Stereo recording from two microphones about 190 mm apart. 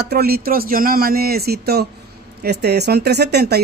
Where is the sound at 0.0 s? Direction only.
55° right (ahead or behind).